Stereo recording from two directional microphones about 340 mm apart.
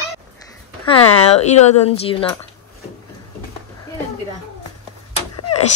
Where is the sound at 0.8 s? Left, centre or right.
Centre.